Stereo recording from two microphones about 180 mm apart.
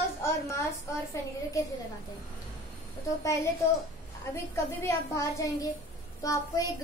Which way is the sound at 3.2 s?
15° left (ahead or behind).